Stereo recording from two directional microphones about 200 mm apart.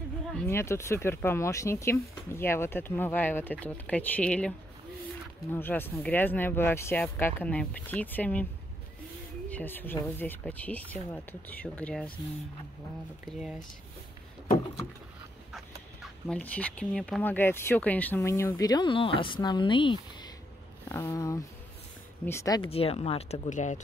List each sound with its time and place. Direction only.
0.5 s speech: 15° left (ahead or behind)
9.5 s speech: 10° left (ahead or behind)
13.2 s speech: 5° right (ahead or behind)
16.3 s speech: 5° left (ahead or behind); by 23.8 s 35° left (ahead or behind)